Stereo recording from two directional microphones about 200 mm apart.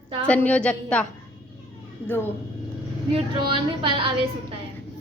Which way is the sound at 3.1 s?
25° right (ahead or behind).